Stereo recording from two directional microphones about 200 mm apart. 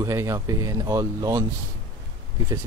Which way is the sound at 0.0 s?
15° right (ahead or behind).